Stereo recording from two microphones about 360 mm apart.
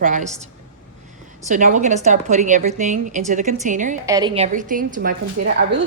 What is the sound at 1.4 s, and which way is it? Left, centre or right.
A woman's voice, right.